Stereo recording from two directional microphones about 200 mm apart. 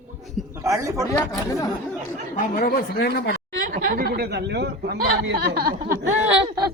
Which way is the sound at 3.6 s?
45° right (ahead or behind).